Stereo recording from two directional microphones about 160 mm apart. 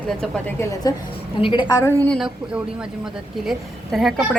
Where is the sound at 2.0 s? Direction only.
Centre (ahead or behind).